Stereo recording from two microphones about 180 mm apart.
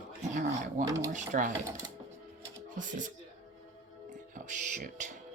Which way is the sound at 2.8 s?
45° right (ahead or behind).